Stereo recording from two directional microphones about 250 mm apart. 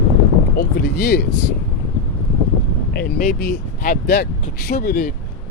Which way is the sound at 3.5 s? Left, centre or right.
Left.